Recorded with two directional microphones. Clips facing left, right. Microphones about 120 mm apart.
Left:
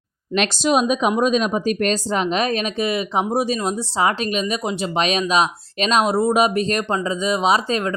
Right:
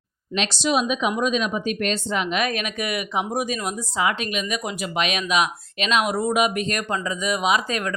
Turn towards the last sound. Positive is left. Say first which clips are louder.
# left 4 dB
turn(degrees=30)  # may be behind; listen again after turning